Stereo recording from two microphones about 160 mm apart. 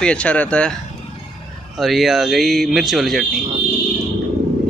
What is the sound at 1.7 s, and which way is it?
Speech, centre (ahead or behind).